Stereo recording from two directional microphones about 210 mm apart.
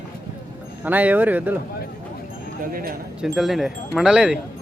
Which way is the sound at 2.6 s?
45° right (ahead or behind).